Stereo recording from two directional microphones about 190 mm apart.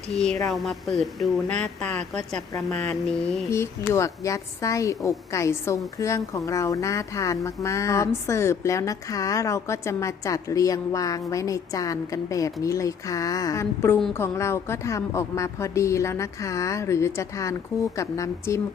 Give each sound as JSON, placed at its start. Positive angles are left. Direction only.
{"t": 0.4, "sound": "speech", "side_deg": 0}